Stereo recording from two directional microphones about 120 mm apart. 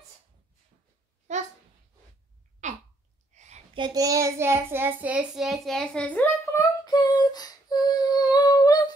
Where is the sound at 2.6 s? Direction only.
90° right.